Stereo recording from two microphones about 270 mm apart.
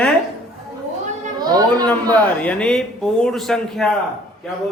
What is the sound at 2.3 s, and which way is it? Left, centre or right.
Speech, centre.